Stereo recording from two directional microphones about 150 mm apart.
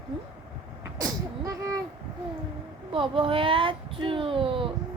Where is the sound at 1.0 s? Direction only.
25° right (ahead or behind).